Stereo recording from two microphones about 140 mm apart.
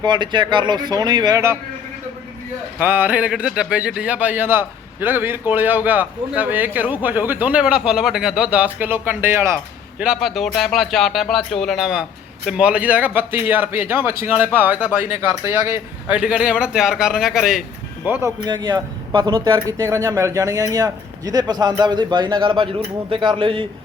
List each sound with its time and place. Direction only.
0.0 s speech: 35° right (ahead or behind)
2.7 s speech: 15° right (ahead or behind)
10.0 s speech: 5° right (ahead or behind); by 15.8 s 20° right (ahead or behind)
16.1 s speech: 10° right (ahead or behind)
18.3 s speech: 30° right (ahead or behind)